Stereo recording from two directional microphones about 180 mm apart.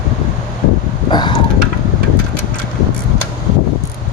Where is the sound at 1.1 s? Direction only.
25° left (ahead or behind).